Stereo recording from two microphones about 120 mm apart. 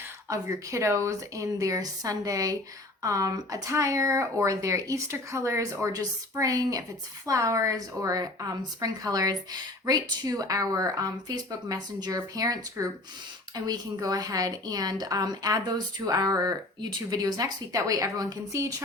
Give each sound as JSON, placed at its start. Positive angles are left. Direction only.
{"t": 0.3, "sound": "a woman's voice", "side_deg": -25}